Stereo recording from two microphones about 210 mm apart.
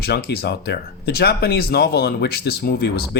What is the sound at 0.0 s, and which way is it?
Speech, 50° left (ahead or behind).